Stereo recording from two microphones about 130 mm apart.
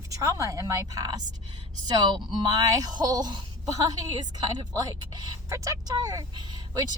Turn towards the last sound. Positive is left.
turn(degrees=-30)  # may be behind; listen again after turning